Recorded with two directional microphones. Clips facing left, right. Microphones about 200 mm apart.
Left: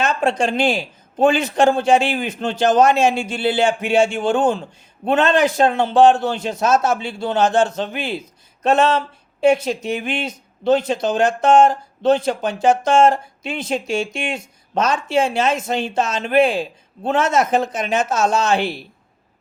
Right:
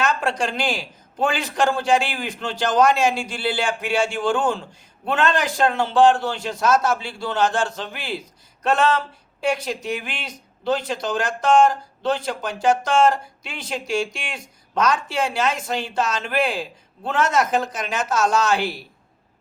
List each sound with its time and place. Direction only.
0.0 s a man's voice: 25° left (ahead or behind)